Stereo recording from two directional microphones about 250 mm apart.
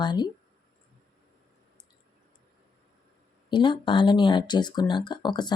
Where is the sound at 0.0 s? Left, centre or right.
Centre.